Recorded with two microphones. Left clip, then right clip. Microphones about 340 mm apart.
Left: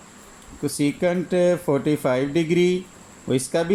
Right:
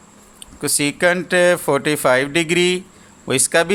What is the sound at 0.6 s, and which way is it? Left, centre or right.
Speech, right.